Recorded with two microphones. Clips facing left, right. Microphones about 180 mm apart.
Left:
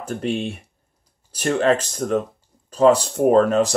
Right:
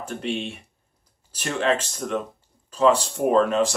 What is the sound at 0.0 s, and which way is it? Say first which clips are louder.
Speech: left 4 dB; 45° left (ahead or behind).